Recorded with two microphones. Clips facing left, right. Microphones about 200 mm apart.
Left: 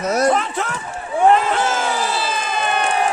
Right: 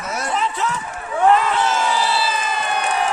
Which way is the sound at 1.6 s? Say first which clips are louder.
Even; 50° left (ahead or behind).